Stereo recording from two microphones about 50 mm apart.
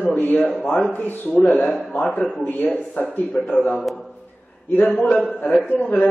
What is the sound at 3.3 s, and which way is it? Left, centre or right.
Speech, left.